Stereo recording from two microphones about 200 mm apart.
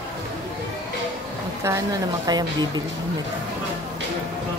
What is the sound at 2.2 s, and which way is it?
Speech, 20° right (ahead or behind).